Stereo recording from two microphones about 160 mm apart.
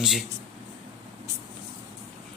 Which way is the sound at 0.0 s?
Centre (ahead or behind).